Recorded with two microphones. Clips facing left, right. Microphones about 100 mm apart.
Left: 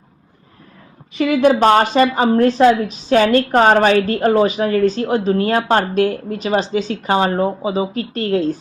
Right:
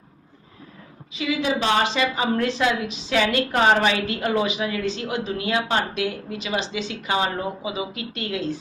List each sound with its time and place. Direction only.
1.1 s a woman's voice: 55° left (ahead or behind)